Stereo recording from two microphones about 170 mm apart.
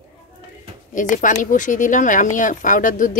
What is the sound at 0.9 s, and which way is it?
Speech, 50° left (ahead or behind).